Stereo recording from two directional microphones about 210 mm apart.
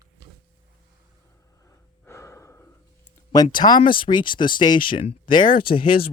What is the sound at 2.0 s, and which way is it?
Breathing, 15° left (ahead or behind).